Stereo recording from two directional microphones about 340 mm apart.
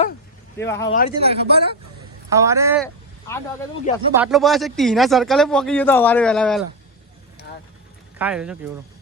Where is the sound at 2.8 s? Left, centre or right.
Centre.